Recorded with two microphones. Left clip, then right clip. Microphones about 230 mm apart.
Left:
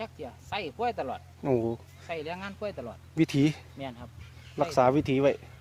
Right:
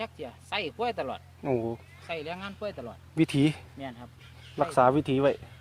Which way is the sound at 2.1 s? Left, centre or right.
Right.